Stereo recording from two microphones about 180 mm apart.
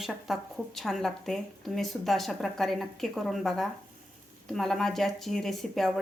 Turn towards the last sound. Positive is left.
turn(degrees=0)  # may be behind; listen again after turning